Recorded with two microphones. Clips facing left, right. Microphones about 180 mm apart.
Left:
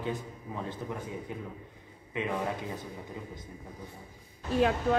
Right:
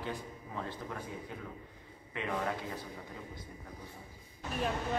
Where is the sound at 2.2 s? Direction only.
20° left (ahead or behind).